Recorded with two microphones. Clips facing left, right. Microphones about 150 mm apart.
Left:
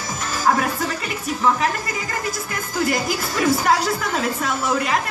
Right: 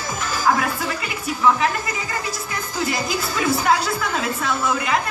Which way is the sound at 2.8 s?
45° left (ahead or behind).